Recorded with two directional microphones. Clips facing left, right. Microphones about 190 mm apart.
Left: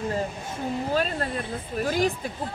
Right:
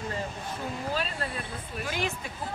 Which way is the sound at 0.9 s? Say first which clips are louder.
Left 6 dB; 45° left (ahead or behind).